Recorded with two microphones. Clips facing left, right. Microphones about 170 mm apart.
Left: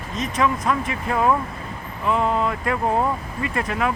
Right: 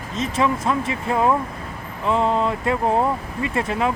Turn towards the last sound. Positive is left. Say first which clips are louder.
# right 2 dB
turn(degrees=-25)  # may be behind; listen again after turning